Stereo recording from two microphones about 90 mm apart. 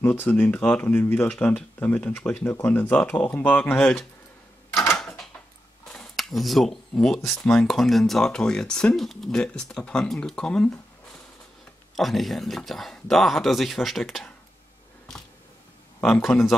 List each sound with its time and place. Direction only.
0.0 s speech: 20° left (ahead or behind)
4.9 s a sound: 5° left (ahead or behind)
5.9 s speech: centre (ahead or behind)
11.9 s speech: centre (ahead or behind)
16.0 s speech: 5° left (ahead or behind)